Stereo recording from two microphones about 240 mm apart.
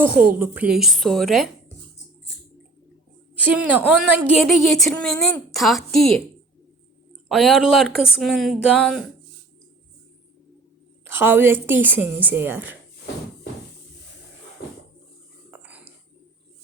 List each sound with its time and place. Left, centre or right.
0.0 s a woman's voice: centre
3.3 s a woman's voice: centre
7.3 s a woman's voice: centre
11.1 s a woman's voice: centre
15.4 s dog: centre